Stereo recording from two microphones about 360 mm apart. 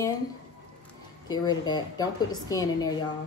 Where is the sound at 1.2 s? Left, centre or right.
Centre.